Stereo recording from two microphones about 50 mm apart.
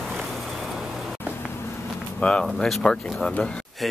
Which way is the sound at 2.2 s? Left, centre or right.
Left.